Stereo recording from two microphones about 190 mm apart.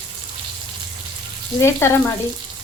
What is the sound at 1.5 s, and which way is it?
Speech, 15° left (ahead or behind).